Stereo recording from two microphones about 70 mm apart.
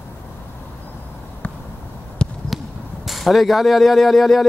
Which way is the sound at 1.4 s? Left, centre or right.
Centre.